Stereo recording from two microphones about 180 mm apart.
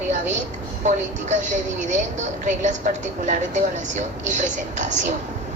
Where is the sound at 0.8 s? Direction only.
45° right (ahead or behind).